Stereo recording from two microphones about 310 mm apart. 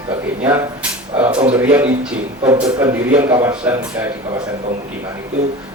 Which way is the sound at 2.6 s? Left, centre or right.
Right.